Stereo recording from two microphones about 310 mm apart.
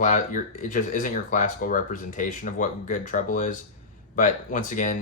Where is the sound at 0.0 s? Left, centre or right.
Left.